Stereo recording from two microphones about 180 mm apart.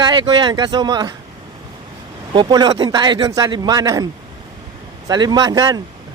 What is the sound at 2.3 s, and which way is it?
A man's voice, 25° right (ahead or behind).